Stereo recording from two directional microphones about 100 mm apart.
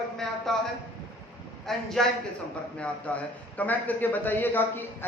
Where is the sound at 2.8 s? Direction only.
15° left (ahead or behind).